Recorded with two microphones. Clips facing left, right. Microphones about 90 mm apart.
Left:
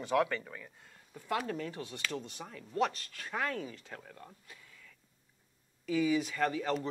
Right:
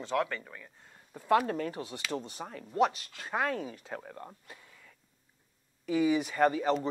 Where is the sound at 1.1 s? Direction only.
45° right (ahead or behind).